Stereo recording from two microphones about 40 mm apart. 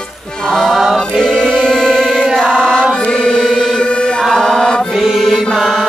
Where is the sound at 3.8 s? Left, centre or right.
Left.